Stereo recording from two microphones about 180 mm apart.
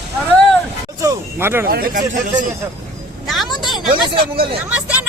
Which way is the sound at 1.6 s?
55° right (ahead or behind).